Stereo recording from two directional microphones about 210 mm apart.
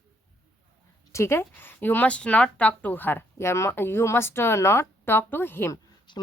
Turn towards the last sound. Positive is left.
turn(degrees=20)  # may be behind; listen again after turning